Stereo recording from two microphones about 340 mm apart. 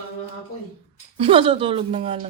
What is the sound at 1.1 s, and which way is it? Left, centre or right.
Speech, centre.